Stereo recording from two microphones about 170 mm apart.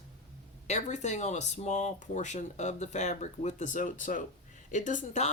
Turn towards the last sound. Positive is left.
turn(degrees=45)  # may be behind; listen again after turning